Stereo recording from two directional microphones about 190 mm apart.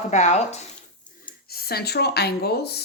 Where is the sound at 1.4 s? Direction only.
55° left (ahead or behind).